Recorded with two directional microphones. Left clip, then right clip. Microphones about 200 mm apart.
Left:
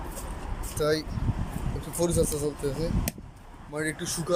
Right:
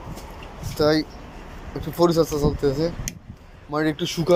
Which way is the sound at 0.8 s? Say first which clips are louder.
Right 7 dB; centre (ahead or behind).